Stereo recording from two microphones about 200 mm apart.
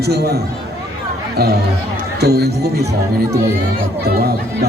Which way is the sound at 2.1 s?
55° right (ahead or behind).